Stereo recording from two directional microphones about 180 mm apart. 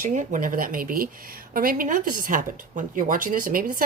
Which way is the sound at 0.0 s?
45° right (ahead or behind).